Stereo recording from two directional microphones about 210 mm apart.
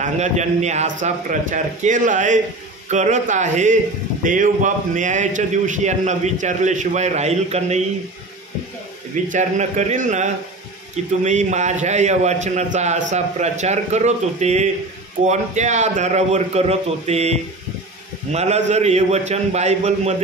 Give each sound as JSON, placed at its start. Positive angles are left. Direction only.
{"t": 0.0, "sound": "a man's voice", "side_deg": -35}
{"t": 9.3, "sound": "a man's voice", "side_deg": -35}